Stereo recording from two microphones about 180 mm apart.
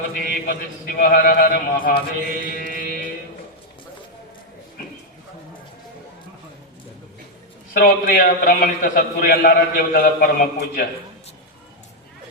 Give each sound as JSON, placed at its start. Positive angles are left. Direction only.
{"t": 0.1, "sound": "a man's voice", "side_deg": 55}
{"t": 2.4, "sound": "mantra", "side_deg": 50}
{"t": 7.7, "sound": "a man's voice", "side_deg": 55}